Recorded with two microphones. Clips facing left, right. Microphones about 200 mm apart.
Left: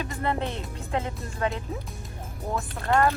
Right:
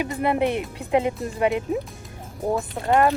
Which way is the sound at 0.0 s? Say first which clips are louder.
Right 7 dB; 15° right (ahead or behind).